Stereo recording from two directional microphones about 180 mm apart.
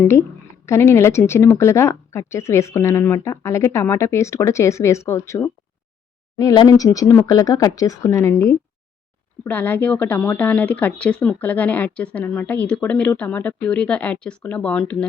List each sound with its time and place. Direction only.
0.0 s speech: 15° left (ahead or behind)